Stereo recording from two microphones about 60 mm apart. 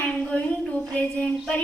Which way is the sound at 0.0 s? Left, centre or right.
Left.